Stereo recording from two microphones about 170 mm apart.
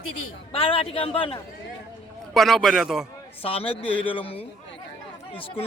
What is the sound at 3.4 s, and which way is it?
A man's voice, 35° left (ahead or behind).